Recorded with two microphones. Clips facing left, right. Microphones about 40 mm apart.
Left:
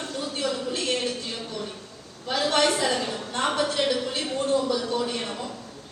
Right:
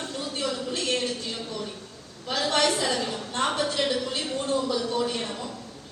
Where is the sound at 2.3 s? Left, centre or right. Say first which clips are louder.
Left 2 dB; left.